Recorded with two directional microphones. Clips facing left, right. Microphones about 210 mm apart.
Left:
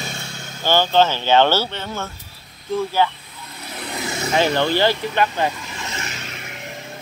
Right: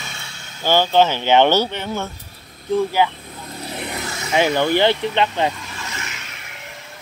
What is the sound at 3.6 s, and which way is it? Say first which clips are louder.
Vehicle: right 4 dB; 30° right (ahead or behind).